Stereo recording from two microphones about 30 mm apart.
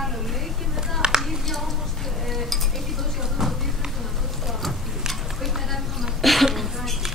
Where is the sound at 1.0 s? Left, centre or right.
Right.